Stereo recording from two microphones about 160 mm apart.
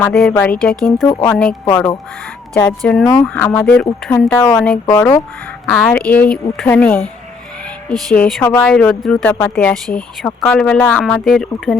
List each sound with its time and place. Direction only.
0.0 s speech: 5° left (ahead or behind)
1.0 s a woman's voice: 20° left (ahead or behind); by 11.8 s centre (ahead or behind)